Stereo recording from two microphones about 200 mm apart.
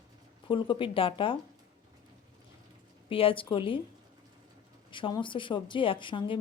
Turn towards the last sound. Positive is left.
turn(degrees=25)  # may be behind; listen again after turning